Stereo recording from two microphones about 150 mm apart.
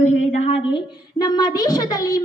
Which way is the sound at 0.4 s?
35° left (ahead or behind).